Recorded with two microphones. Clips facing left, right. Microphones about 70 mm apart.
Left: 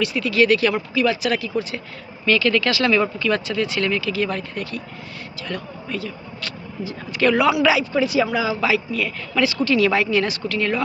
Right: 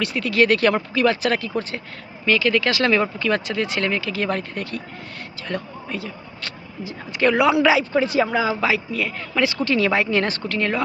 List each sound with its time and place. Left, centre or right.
0.0 s speech: right
2.2 s speech: centre; by 4.8 s right
5.5 s speech: right